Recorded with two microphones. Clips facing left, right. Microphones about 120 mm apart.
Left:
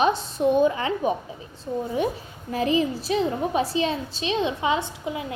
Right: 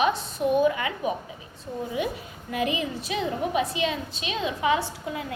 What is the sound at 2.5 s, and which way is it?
A woman's voice, 35° left (ahead or behind).